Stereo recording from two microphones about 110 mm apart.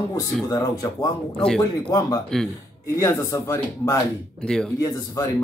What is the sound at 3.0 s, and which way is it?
Speech, 30° left (ahead or behind).